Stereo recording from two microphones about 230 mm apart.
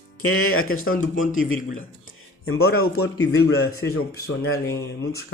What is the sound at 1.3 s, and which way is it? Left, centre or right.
A man's voice, left.